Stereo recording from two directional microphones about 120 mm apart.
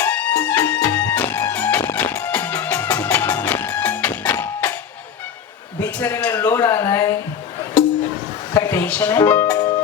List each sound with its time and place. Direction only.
0.0 s music: 10° left (ahead or behind)
5.8 s speech: 15° left (ahead or behind)
8.5 s speech: 20° left (ahead or behind)